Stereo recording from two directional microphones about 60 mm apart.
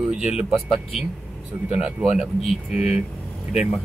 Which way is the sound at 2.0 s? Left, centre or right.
Centre.